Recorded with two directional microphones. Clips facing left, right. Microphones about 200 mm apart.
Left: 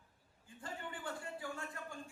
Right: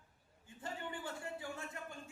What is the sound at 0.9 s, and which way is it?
Speech, 25° right (ahead or behind).